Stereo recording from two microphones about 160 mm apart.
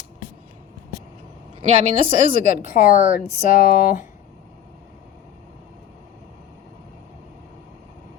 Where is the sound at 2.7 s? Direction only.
60° left (ahead or behind).